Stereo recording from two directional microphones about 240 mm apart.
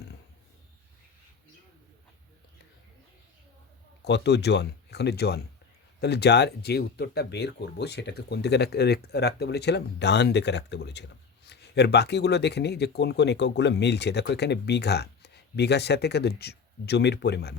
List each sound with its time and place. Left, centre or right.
4.0 s speech: left